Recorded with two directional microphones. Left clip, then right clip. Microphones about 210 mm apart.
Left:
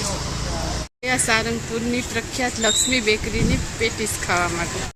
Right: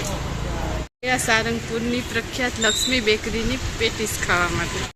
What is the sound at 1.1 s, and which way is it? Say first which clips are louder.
Speech: even; 5° left (ahead or behind).